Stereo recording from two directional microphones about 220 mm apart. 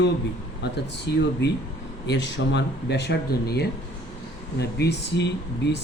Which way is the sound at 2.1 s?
50° left (ahead or behind).